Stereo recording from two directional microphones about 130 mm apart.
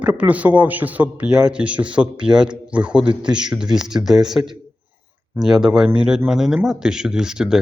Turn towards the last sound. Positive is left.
turn(degrees=-5)  # may be behind; listen again after turning